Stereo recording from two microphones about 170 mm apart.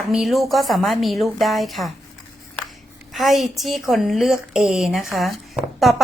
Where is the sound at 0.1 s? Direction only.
Centre (ahead or behind).